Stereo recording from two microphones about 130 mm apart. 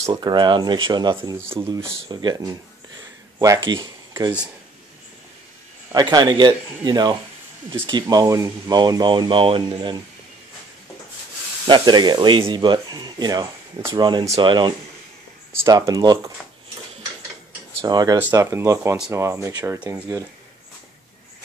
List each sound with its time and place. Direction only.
0.1 s speech: 35° right (ahead or behind)
3.7 s a sound: 35° right (ahead or behind)
5.9 s speech: 30° right (ahead or behind)
11.6 s speech: 35° right (ahead or behind)
15.6 s speech: 25° right (ahead or behind)
16.4 s a sound: centre (ahead or behind)
17.8 s speech: 30° right (ahead or behind)